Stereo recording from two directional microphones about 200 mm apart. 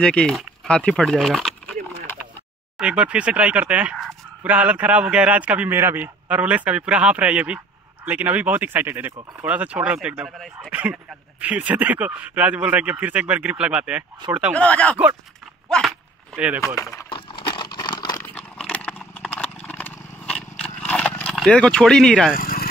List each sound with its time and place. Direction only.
0.0 s speech: 5° left (ahead or behind)
2.8 s speech: 5° right (ahead or behind)
14.5 s speech: 5° left (ahead or behind)
16.3 s speech: 5° right (ahead or behind)
16.6 s a sound: 15° left (ahead or behind)
22.4 s a sound: 45° left (ahead or behind)